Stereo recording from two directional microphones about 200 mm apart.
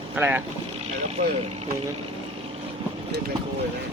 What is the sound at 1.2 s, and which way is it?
Speech, 35° right (ahead or behind).